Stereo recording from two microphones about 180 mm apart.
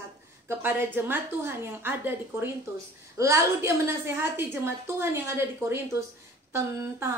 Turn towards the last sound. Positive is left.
turn(degrees=-15)  # may be behind; listen again after turning